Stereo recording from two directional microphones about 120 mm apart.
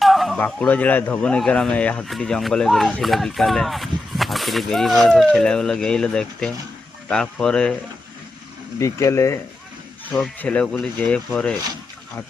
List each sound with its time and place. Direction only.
0.0 s a sound: centre (ahead or behind)
0.3 s speech: 15° left (ahead or behind)
8.8 s speech: 25° left (ahead or behind)
10.3 s speech: 10° left (ahead or behind)